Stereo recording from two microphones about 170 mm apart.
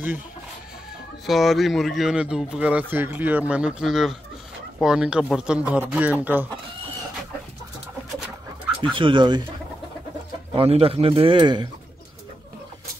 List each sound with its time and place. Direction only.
1.2 s speech: centre (ahead or behind)
8.8 s speech: 30° right (ahead or behind)
10.5 s speech: 35° right (ahead or behind)